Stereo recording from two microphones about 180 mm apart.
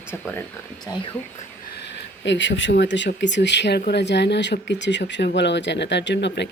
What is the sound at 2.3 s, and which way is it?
Speech, 90° left.